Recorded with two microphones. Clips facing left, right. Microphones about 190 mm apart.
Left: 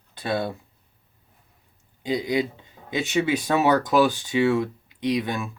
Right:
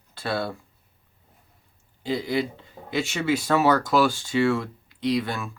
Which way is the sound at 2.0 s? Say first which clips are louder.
Left 1 dB; 20° left (ahead or behind).